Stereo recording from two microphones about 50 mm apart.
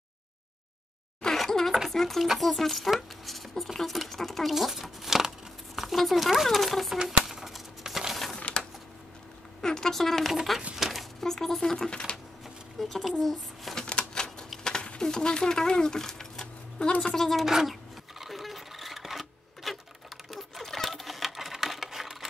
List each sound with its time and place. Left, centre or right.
1.2 s a sound: centre
1.9 s stir: centre
2.2 s speech: centre
7.0 s a sound: centre
8.4 s typewriter: left
9.6 s speech: centre
11.9 s speech: left
12.7 s speech: centre
13.2 s a sound: centre
13.7 s a sound: centre
17.0 s speech: centre
17.5 s speech: centre
18.2 s sewing machine: centre